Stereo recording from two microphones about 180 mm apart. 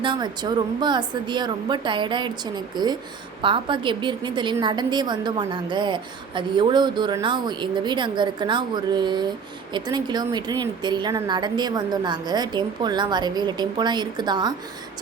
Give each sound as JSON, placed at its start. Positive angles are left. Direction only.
{"t": 0.0, "sound": "a woman's voice", "side_deg": -25}